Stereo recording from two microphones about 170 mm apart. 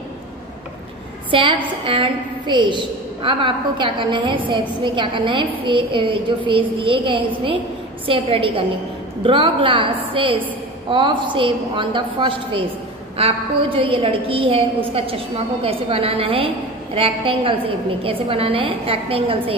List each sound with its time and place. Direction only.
1.3 s a woman's voice: 30° right (ahead or behind)